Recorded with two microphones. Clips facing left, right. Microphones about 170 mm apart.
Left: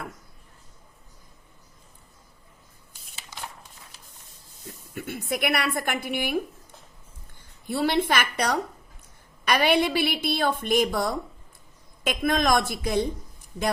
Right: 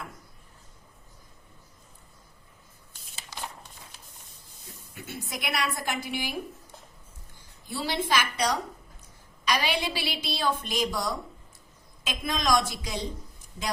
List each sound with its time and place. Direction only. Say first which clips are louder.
4.9 s a woman's voice: left 9 dB; 60° left (ahead or behind)
7.7 s a woman's voice: left 5 dB; 55° left (ahead or behind)